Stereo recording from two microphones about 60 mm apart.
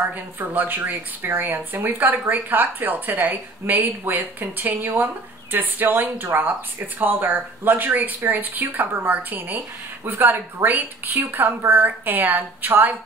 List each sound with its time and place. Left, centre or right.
0.1 s speech: right